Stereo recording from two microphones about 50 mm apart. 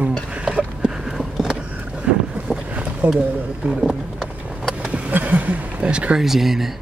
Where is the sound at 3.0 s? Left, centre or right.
Right.